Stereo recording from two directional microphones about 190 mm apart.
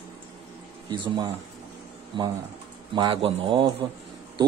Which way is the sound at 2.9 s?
25° right (ahead or behind).